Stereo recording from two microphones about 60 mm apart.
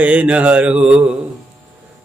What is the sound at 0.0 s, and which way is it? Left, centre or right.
Mantra, right.